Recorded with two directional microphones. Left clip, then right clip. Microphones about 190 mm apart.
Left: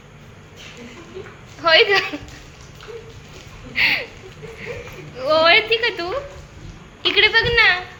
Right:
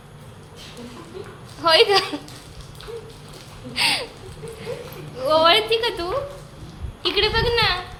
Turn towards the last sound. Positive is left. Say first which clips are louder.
# left 5 dB
turn(degrees=5)  # may be behind; listen again after turning